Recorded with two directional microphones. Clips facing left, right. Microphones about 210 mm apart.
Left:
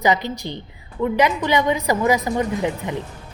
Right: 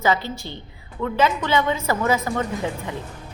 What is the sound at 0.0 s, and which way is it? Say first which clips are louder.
A woman's voice: left 2 dB; 15° left (ahead or behind).